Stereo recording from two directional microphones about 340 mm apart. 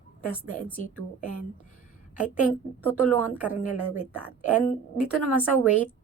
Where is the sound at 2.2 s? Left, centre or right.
Centre.